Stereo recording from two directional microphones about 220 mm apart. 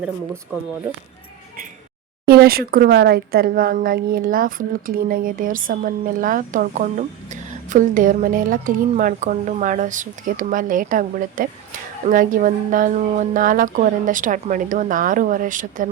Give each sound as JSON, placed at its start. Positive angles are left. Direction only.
{"t": 2.2, "sound": "speech", "side_deg": -45}